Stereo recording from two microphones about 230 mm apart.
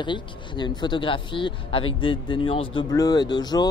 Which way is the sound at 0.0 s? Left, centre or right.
Centre.